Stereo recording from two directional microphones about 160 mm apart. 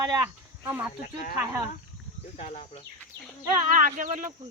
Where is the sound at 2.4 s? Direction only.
45° left (ahead or behind).